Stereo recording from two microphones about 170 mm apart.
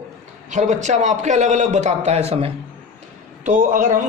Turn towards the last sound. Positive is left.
turn(degrees=-50)  # may be behind; listen again after turning